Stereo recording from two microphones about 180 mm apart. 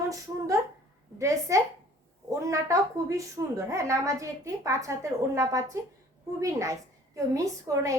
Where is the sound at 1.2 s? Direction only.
15° right (ahead or behind).